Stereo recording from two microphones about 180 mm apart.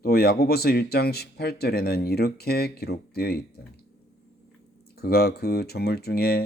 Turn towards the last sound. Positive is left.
turn(degrees=60)  # may be behind; listen again after turning